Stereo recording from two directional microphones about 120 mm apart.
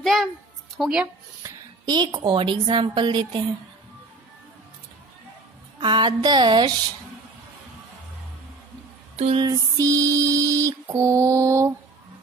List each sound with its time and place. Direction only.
0.0 s music: centre (ahead or behind)
0.7 s speech: 5° right (ahead or behind)
1.4 s a sound: 35° right (ahead or behind)
2.1 s speech: 40° right (ahead or behind)
5.8 s speech: 40° right (ahead or behind)
9.1 s music: 60° right (ahead or behind)
9.4 s speech: 30° right (ahead or behind)
10.9 s mantra: 25° right (ahead or behind)